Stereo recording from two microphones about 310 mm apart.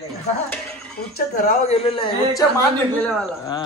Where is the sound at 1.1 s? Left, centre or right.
Left.